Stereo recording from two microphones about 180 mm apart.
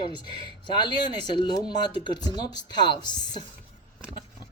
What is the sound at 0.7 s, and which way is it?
Speech, 25° left (ahead or behind).